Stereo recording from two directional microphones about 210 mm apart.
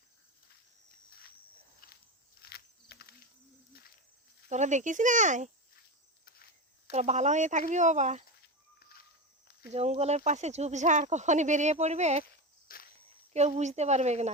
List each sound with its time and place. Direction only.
1.8 s walk: 45° left (ahead or behind)
2.4 s a sound: 50° left (ahead or behind)
4.4 s speech: 35° right (ahead or behind)
6.2 s cricket: 45° left (ahead or behind)
6.9 s speech: 35° right (ahead or behind)
8.8 s a sound: 45° left (ahead or behind)
9.7 s speech: 30° right (ahead or behind)
12.7 s walk: 40° left (ahead or behind)
13.3 s speech: 35° right (ahead or behind)